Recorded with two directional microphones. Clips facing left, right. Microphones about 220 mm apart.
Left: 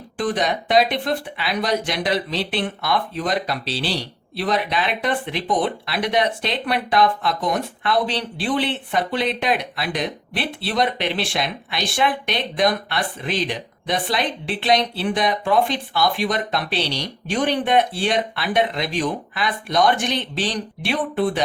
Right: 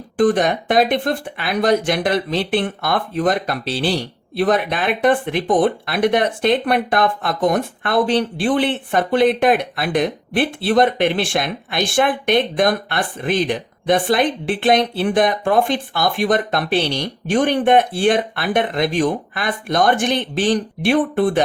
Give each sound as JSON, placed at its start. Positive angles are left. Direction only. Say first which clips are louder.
{"t": 0.2, "sound": "speech", "louder": "right 7 dB", "side_deg": -50}